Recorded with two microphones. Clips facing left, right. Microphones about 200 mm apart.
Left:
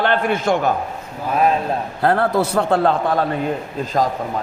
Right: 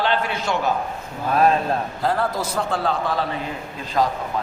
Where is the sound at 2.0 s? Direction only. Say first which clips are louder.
Left 9 dB; 60° left (ahead or behind).